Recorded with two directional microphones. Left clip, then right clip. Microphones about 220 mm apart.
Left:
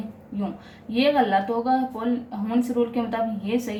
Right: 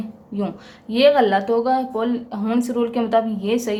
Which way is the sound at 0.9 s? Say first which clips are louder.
Right 5 dB; 50° right (ahead or behind).